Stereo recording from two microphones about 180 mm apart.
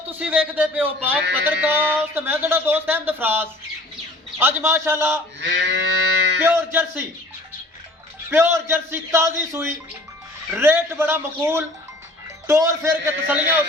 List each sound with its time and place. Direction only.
0.2 s speech: 10° right (ahead or behind)
5.4 s livestock: 80° right
6.4 s music: 10° right (ahead or behind)
8.3 s speech: 15° right (ahead or behind)